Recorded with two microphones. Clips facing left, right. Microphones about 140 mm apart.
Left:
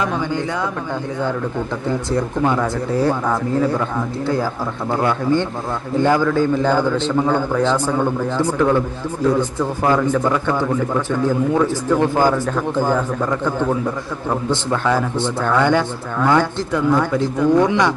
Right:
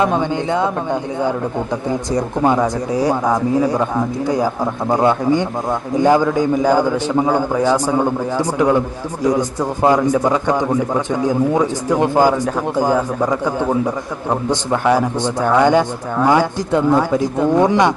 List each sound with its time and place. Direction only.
0.0 s speech: 25° right (ahead or behind)
1.9 s speech: 15° right (ahead or behind)